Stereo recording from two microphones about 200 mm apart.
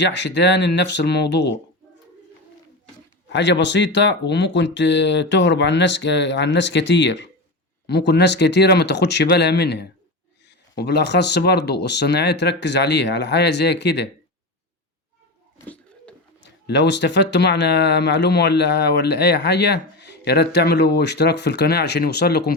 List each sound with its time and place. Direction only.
0.0 s speech: 60° left (ahead or behind)
3.2 s speech: 60° left (ahead or behind)
15.5 s a sound: 5° left (ahead or behind)
16.4 s speech: 60° left (ahead or behind)